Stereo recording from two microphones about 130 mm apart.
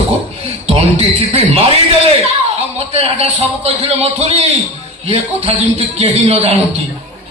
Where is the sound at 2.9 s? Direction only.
55° right (ahead or behind).